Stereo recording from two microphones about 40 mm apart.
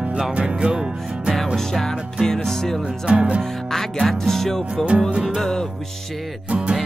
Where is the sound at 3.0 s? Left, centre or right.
Right.